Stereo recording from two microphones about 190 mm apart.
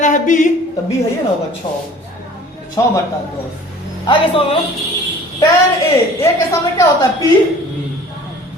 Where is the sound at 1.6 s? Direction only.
25° left (ahead or behind).